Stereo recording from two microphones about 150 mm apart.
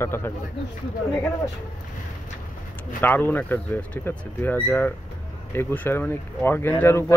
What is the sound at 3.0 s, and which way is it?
A man's voice, 15° left (ahead or behind).